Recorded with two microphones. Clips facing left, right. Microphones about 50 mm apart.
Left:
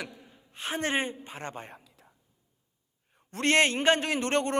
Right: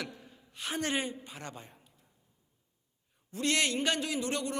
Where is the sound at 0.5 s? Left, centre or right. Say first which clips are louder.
Left 4 dB; left.